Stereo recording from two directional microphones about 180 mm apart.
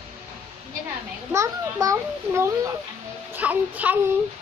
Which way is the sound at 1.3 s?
15° right (ahead or behind).